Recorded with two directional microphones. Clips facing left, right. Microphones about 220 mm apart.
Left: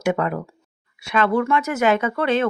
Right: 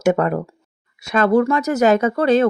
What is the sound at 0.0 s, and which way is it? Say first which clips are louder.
Speech: right 5 dB; 45° right (ahead or behind).